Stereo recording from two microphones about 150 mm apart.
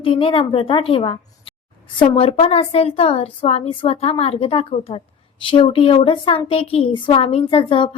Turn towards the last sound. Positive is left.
turn(degrees=35)  # may be behind; listen again after turning